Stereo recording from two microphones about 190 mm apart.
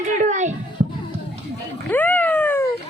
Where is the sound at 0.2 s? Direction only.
40° right (ahead or behind).